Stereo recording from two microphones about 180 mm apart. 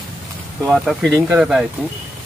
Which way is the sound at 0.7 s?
Centre (ahead or behind).